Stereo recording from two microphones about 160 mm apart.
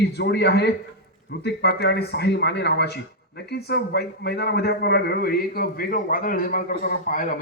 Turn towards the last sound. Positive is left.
turn(degrees=55)  # may be behind; listen again after turning